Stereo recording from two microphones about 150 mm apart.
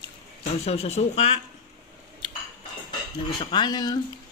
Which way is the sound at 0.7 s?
45° left (ahead or behind).